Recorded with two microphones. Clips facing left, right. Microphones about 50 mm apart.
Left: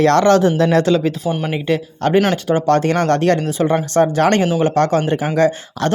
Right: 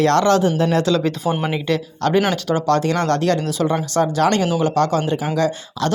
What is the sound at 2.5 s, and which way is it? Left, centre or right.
Speech, left.